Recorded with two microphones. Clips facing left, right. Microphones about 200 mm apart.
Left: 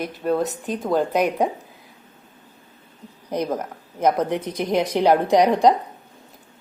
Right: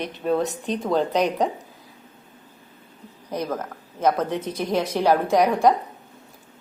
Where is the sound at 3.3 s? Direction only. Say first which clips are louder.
Left 3 dB; 15° left (ahead or behind).